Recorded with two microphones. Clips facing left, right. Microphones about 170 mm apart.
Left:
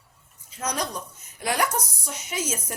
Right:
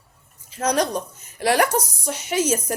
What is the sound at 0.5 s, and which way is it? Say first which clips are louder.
A woman's voice: right 8 dB; 85° right.